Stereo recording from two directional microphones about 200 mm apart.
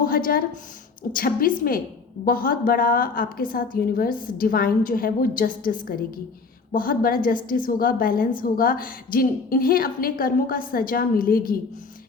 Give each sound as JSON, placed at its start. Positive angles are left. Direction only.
{"t": 0.0, "sound": "a woman's voice", "side_deg": 45}